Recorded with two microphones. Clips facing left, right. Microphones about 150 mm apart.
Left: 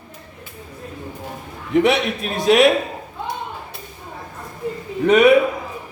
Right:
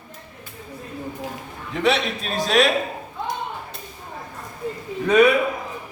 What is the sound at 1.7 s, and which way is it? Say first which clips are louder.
A man's voice: left 5 dB; 15° left (ahead or behind).